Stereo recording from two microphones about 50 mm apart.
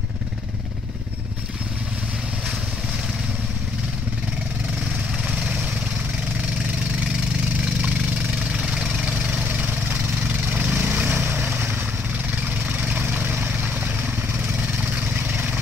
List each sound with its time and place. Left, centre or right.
7.8 s engine: centre
9.5 s vehicle: right
12.4 s vehicle: right
14.9 s vehicle: right